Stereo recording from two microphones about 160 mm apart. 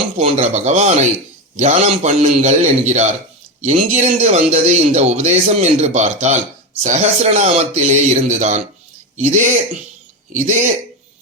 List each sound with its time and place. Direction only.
0.2 s a man's voice: 45° right (ahead or behind)